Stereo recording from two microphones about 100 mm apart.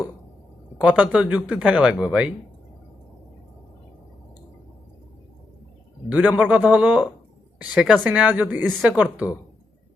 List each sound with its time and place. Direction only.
0.8 s speech: 10° right (ahead or behind)
6.1 s speech: 15° right (ahead or behind)